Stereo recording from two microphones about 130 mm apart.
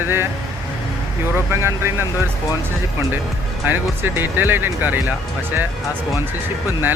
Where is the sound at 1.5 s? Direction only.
20° right (ahead or behind).